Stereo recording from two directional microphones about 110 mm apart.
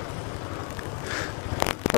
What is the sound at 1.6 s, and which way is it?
Vehicle, centre (ahead or behind).